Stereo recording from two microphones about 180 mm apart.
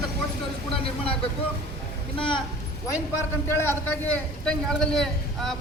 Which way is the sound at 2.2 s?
25° left (ahead or behind).